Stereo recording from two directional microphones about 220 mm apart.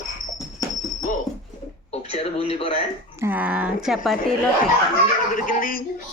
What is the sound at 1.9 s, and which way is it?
Speech, 30° left (ahead or behind).